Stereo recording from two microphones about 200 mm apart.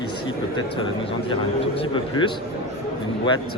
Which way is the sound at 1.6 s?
25° left (ahead or behind).